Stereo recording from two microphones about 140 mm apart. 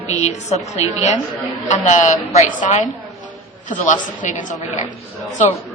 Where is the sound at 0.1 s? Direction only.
55° left (ahead or behind).